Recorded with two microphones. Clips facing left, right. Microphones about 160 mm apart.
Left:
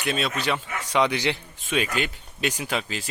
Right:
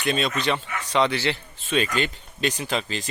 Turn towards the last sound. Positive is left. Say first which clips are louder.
# right 1 dB
turn(degrees=10)  # may be behind; listen again after turning